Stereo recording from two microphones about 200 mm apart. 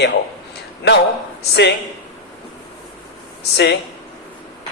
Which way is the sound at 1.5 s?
60° left (ahead or behind).